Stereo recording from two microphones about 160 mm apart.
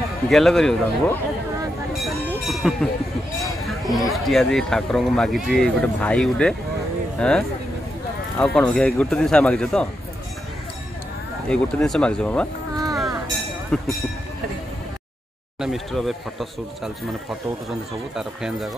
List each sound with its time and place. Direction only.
0.3 s speech: centre (ahead or behind)
2.0 s a sound: centre (ahead or behind)
3.8 s speech: centre (ahead or behind)
11.4 s speech: 5° left (ahead or behind)
12.7 s music: 20° right (ahead or behind)
13.7 s speech: 5° left (ahead or behind)
15.6 s speech: centre (ahead or behind)
18.1 s speech: 5° right (ahead or behind)